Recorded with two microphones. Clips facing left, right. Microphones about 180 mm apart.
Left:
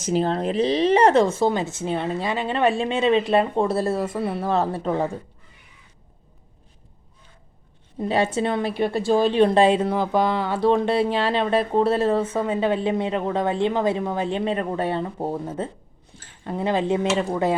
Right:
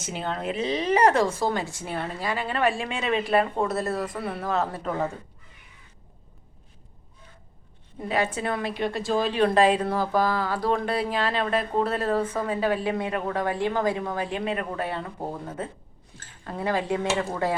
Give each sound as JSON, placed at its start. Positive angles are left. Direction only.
{"t": 0.0, "sound": "a woman's voice", "side_deg": 35}
{"t": 7.9, "sound": "a woman's voice", "side_deg": 30}